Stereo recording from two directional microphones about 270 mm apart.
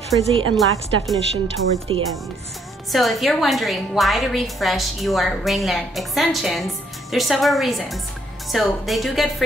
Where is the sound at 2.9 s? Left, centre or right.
Centre.